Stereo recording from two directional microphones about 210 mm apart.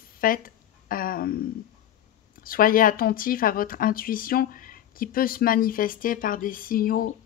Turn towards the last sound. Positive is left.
turn(degrees=45)  # may be behind; listen again after turning